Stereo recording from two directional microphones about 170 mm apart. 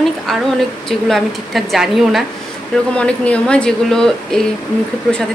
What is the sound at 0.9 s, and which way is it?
Speech, centre (ahead or behind).